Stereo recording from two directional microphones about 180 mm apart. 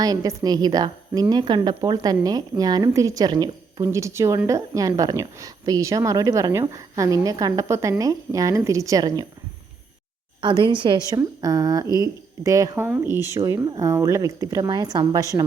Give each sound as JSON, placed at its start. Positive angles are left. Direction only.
{"t": 0.0, "sound": "a woman's voice", "side_deg": -20}
{"t": 10.4, "sound": "a woman's voice", "side_deg": -25}